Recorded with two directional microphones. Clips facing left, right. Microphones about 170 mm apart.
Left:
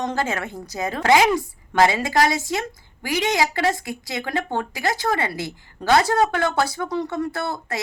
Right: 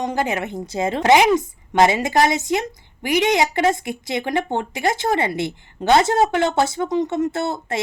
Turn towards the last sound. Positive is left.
turn(degrees=-25)  # may be behind; listen again after turning